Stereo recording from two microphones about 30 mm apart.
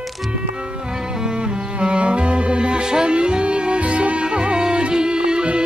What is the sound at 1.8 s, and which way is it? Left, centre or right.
Music, right.